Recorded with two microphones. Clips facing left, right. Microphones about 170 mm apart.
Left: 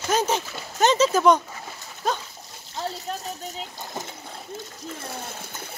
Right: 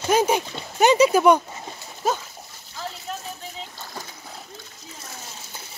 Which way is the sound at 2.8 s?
40° left (ahead or behind).